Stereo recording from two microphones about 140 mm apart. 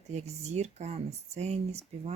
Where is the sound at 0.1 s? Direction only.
50° right (ahead or behind).